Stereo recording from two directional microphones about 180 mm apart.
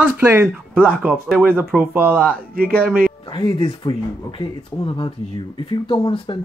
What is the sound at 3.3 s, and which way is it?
Speech, 25° left (ahead or behind).